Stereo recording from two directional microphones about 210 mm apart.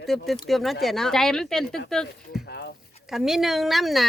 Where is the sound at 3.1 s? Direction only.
Centre (ahead or behind).